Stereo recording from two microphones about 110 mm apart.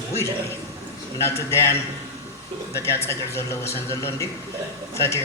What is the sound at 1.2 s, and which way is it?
Speech, 25° left (ahead or behind).